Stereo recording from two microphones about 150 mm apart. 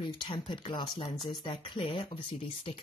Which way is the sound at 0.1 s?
30° left (ahead or behind).